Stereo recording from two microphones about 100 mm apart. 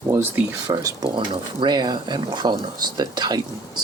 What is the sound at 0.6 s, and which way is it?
Speech, 40° right (ahead or behind).